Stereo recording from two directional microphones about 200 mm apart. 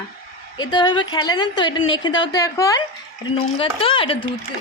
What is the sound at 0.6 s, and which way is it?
Speech, 20° left (ahead or behind).